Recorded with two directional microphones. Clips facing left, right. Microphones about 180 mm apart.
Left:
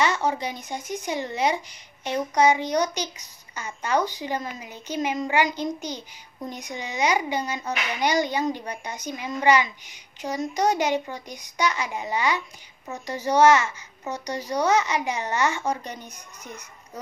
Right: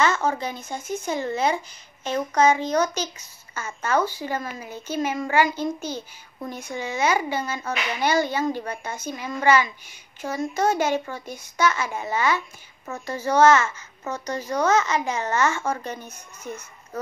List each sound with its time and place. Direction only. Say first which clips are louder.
0.0 s a child's voice: right 1 dB; 15° left (ahead or behind)